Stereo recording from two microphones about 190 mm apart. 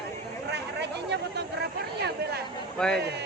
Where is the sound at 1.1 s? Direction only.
60° right (ahead or behind).